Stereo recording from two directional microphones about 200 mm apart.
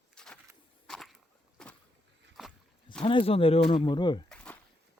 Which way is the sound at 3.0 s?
25° left (ahead or behind).